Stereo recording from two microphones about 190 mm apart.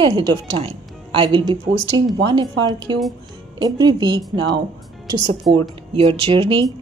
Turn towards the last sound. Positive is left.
turn(degrees=-25)  # may be behind; listen again after turning